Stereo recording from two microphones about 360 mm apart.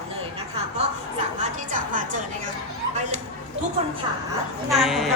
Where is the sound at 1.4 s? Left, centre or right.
Right.